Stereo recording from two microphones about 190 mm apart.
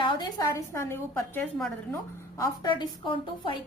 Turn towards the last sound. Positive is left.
turn(degrees=25)  # may be behind; listen again after turning